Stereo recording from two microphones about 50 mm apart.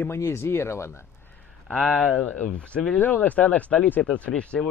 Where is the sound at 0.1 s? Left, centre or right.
Left.